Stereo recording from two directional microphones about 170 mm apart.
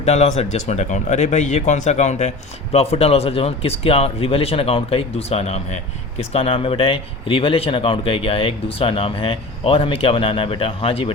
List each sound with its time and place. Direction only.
0.0 s speech: 40° left (ahead or behind)